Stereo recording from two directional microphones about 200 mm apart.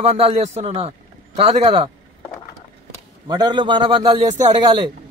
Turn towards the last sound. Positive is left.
turn(degrees=-25)  # may be behind; listen again after turning